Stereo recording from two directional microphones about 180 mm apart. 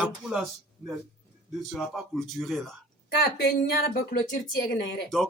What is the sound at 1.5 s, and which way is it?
Speech, centre (ahead or behind).